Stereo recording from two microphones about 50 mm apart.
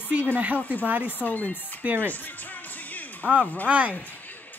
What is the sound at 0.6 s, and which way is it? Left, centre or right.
Speech, left.